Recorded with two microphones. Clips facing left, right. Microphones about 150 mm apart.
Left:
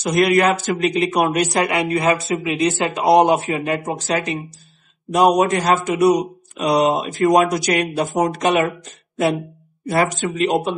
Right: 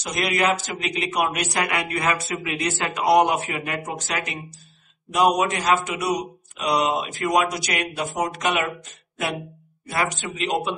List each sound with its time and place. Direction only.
0.0 s speech: 50° left (ahead or behind)
9.8 s speech: 40° left (ahead or behind)